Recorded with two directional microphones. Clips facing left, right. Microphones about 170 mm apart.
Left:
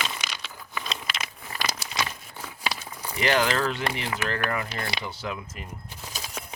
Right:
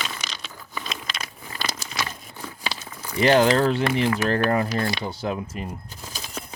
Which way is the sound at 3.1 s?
35° right (ahead or behind).